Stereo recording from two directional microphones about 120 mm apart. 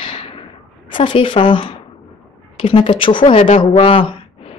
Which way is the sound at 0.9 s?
45° left (ahead or behind).